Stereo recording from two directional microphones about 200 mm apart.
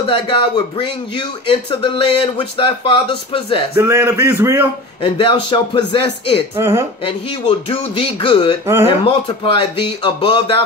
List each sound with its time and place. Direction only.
0.0 s a man's voice: 25° left (ahead or behind)
3.7 s speech: 15° right (ahead or behind)
5.0 s a man's voice: 25° left (ahead or behind)
6.5 s speech: 15° right (ahead or behind)
7.1 s a man's voice: 25° left (ahead or behind)